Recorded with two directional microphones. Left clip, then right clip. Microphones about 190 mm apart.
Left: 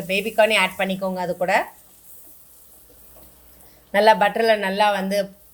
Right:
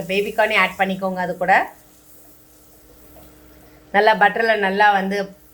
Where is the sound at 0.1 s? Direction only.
45° left (ahead or behind).